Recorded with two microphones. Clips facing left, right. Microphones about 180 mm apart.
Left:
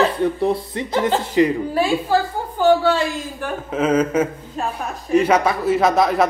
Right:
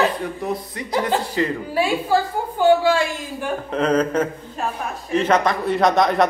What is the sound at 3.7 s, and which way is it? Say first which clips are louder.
A woman's voice: left 2 dB; 5° left (ahead or behind).